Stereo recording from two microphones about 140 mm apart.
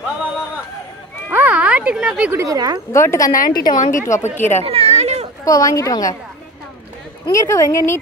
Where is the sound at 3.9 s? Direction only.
20° left (ahead or behind).